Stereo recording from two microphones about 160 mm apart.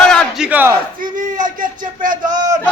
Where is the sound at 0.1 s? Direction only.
Centre (ahead or behind).